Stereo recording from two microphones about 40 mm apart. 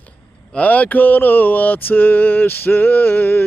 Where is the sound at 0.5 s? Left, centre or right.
Left.